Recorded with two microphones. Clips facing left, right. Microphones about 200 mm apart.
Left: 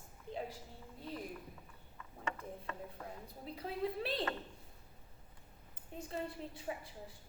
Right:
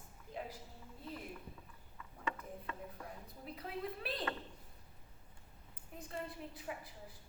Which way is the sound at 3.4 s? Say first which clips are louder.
Left 4 dB; 30° left (ahead or behind).